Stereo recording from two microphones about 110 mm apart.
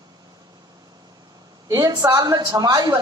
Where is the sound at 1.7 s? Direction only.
35° right (ahead or behind).